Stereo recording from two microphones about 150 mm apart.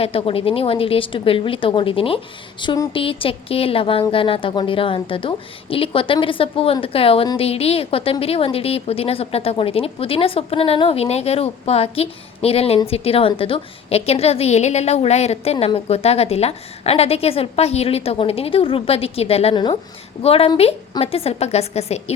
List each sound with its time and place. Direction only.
0.0 s a woman's voice: 40° left (ahead or behind)